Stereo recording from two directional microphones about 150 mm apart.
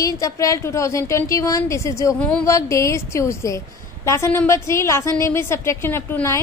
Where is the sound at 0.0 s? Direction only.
20° left (ahead or behind).